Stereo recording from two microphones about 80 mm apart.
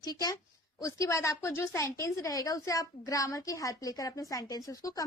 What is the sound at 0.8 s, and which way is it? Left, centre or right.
Speech, left.